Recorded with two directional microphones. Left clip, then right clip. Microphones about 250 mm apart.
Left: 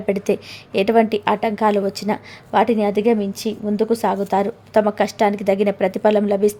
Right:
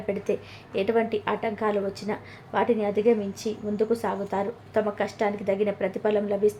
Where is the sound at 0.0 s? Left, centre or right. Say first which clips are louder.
Left 8 dB; left.